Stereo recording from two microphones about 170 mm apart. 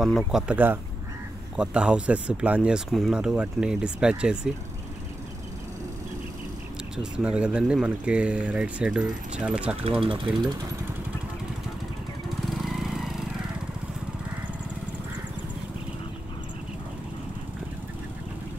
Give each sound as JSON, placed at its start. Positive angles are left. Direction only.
{"t": 0.0, "sound": "speech", "side_deg": 0}
{"t": 7.0, "sound": "speech", "side_deg": -5}
{"t": 10.0, "sound": "speech", "side_deg": -30}
{"t": 12.3, "sound": "vehicle", "side_deg": 0}